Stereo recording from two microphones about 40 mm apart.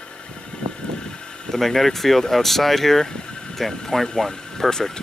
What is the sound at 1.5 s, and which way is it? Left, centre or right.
Speech, centre.